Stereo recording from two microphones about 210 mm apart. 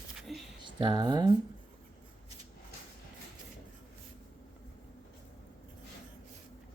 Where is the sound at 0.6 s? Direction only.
25° right (ahead or behind).